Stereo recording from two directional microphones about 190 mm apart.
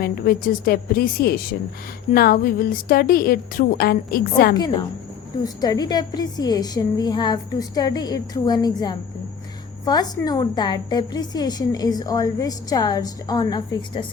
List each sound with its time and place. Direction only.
0.0 s a woman's voice: 50° left (ahead or behind)
4.5 s a woman's voice: 20° left (ahead or behind)